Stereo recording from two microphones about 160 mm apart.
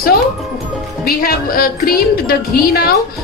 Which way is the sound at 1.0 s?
65° left (ahead or behind).